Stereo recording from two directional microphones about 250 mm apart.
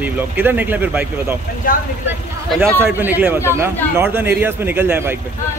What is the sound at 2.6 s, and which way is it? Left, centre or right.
Speech, centre.